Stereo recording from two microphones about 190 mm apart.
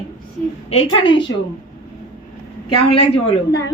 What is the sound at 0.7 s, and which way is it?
Speech, 30° left (ahead or behind).